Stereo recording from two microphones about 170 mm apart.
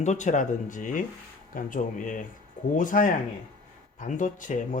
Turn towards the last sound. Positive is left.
turn(degrees=50)  # may be behind; listen again after turning